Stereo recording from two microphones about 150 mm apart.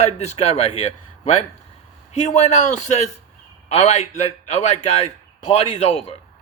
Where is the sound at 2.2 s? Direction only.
50° left (ahead or behind).